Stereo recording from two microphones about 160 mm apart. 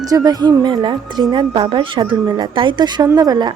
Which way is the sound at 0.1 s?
25° right (ahead or behind).